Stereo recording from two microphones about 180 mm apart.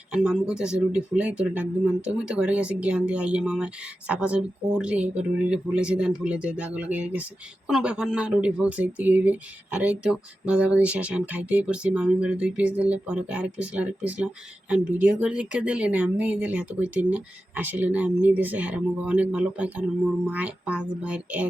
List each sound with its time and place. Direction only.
0.1 s speech: 5° right (ahead or behind)